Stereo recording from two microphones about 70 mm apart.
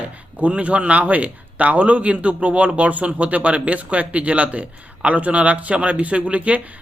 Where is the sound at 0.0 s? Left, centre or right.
Centre.